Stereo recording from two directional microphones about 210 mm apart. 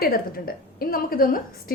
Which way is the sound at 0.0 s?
45° left (ahead or behind).